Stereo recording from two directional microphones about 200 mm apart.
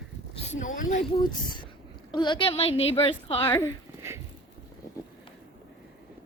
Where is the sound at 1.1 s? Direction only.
20° left (ahead or behind).